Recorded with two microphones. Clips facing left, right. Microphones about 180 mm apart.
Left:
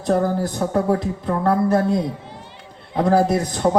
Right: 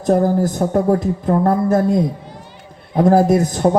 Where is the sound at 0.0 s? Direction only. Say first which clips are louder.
Right 4 dB; 50° right (ahead or behind).